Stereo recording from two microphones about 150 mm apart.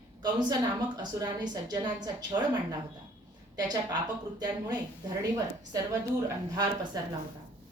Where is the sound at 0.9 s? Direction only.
25° right (ahead or behind).